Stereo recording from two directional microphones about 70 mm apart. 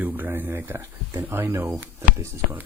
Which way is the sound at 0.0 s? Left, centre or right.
Right.